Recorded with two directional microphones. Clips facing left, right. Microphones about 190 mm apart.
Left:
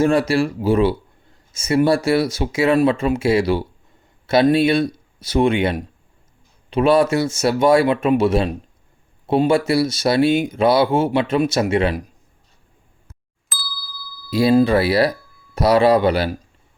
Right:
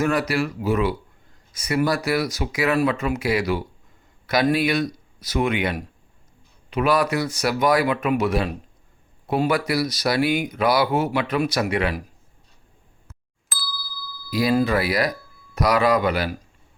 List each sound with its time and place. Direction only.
0.0 s speech: 30° left (ahead or behind)
13.5 s ding: centre (ahead or behind)
14.3 s speech: 30° left (ahead or behind)